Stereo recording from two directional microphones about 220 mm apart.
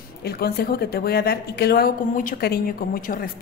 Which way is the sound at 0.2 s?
45° left (ahead or behind).